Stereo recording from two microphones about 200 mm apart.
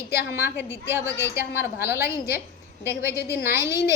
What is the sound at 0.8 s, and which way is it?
A woman's voice, 15° right (ahead or behind).